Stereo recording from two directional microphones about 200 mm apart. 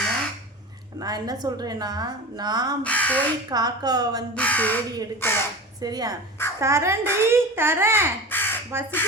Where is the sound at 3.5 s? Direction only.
20° right (ahead or behind).